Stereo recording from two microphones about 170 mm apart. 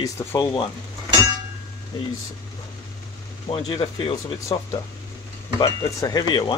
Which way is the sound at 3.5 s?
30° left (ahead or behind).